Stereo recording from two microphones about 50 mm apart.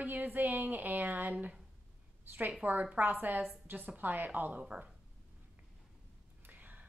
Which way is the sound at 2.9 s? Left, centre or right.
Right.